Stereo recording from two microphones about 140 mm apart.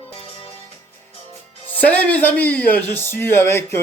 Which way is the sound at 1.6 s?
10° left (ahead or behind).